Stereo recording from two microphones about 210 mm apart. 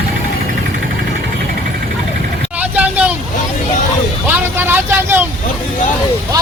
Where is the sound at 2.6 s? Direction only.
5° right (ahead or behind).